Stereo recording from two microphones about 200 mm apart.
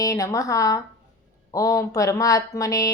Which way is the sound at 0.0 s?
15° left (ahead or behind).